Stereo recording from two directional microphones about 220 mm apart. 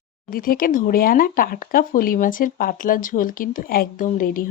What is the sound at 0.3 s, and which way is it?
Speech, 40° left (ahead or behind).